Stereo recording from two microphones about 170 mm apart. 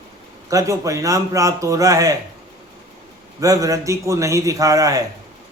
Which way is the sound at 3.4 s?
20° right (ahead or behind).